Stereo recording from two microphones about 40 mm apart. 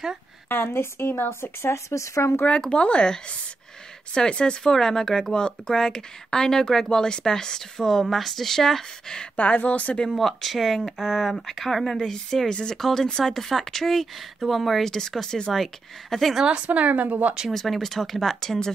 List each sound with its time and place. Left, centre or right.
0.5 s speech: left
2.6 s speech: left
4.1 s speech: left
4.6 s speech: centre
9.4 s speech: left
10.0 s speech: centre
16.4 s speech: right
17.5 s speech: centre